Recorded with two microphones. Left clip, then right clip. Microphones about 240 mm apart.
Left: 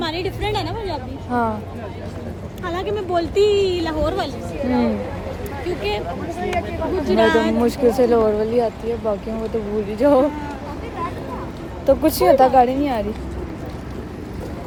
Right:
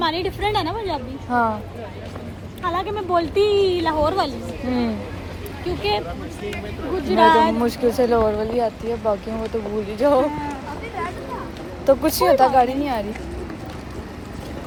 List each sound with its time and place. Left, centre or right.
0.0 s a sound: right
1.3 s speech: centre
2.6 s speech: centre
5.6 s speech: right
7.1 s speech: right
7.6 s speech: centre
11.9 s speech: centre